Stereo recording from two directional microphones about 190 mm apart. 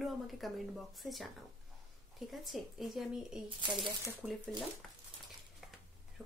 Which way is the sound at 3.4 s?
25° right (ahead or behind).